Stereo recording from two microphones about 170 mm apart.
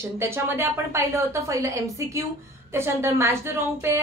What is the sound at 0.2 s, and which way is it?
A woman's voice, 15° right (ahead or behind).